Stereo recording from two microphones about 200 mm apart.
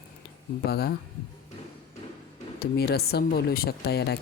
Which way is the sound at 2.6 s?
50° left (ahead or behind).